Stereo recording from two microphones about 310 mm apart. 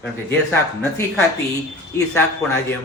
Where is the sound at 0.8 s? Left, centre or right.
Centre.